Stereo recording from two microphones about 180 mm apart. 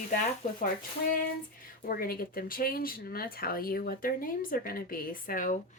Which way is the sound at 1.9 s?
55° left (ahead or behind).